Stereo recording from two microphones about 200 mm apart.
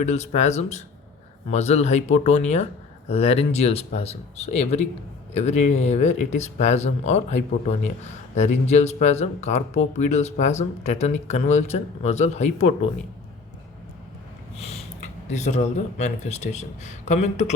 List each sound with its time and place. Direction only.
0.0 s speech: 35° left (ahead or behind)
14.5 s a sound: 30° left (ahead or behind)
15.3 s speech: 35° left (ahead or behind)